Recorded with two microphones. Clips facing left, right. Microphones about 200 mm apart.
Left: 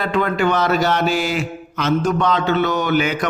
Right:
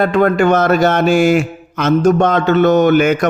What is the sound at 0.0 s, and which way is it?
A man's voice, 50° right (ahead or behind).